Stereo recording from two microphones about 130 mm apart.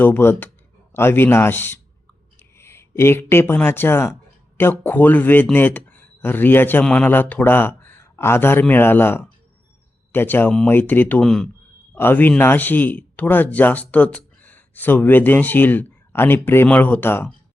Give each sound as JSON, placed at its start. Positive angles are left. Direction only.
{"t": 0.0, "sound": "a man's voice", "side_deg": 15}
{"t": 11.9, "sound": "a man's voice", "side_deg": 15}